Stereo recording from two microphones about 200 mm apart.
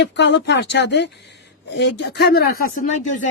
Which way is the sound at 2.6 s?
40° left (ahead or behind).